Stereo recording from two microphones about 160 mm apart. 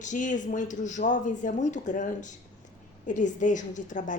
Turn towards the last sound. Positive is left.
turn(degrees=50)  # may be behind; listen again after turning